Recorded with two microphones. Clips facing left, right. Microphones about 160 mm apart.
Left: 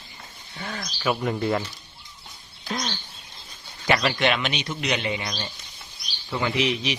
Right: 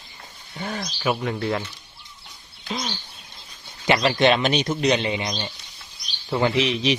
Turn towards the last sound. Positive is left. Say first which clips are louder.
# right 4 dB
turn(degrees=-30)  # may be behind; listen again after turning